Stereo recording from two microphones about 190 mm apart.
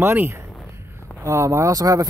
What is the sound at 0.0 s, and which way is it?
Speech, 10° right (ahead or behind).